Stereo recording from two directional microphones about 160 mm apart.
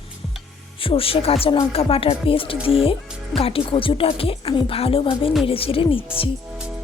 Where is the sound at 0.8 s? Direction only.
35° left (ahead or behind).